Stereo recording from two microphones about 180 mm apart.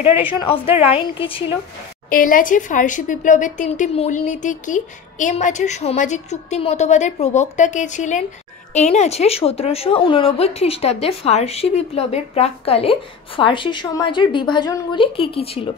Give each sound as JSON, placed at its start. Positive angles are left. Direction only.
{"t": 0.2, "sound": "speech", "side_deg": 30}
{"t": 2.0, "sound": "a woman's voice", "side_deg": 50}